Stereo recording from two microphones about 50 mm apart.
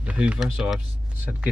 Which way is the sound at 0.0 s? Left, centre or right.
Right.